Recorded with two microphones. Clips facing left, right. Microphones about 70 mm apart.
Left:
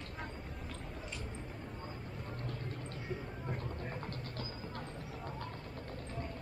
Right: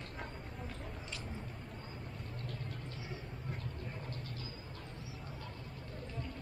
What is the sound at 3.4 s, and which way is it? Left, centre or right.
Vehicle, left.